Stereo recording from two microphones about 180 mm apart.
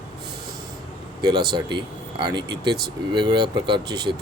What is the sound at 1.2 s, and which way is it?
Speech, 25° right (ahead or behind).